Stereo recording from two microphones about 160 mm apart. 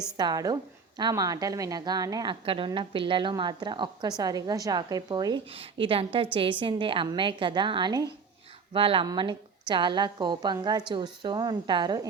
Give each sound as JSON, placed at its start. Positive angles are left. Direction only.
{"t": 0.2, "sound": "a woman's voice", "side_deg": -25}